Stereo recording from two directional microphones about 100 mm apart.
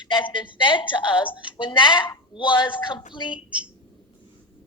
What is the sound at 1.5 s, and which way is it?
A woman's voice, 50° left (ahead or behind).